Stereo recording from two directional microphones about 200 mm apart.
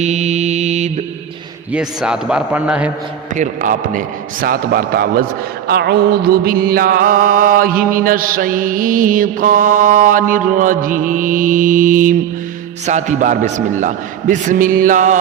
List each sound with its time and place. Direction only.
0.0 s mantra: 35° right (ahead or behind)
1.7 s a man's voice: 5° right (ahead or behind)
3.3 s a man's voice: 40° right (ahead or behind)